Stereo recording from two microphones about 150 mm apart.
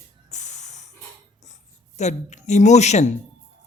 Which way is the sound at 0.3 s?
50° left (ahead or behind).